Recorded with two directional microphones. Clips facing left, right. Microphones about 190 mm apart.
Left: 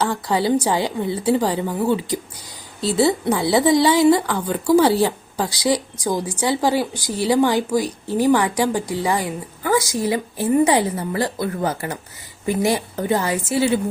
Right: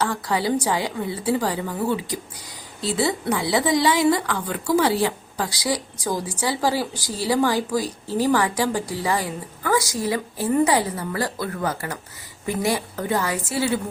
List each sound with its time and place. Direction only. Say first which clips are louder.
0.1 s speech: left 4 dB; 25° left (ahead or behind)